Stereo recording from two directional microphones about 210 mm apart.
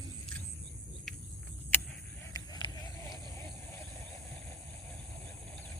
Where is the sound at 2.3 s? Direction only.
15° left (ahead or behind).